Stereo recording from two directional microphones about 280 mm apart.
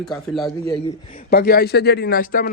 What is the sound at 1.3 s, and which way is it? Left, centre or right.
Speech, left.